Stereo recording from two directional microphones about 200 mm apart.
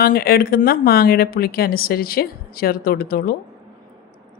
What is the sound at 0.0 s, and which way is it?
A woman's voice, 50° left (ahead or behind).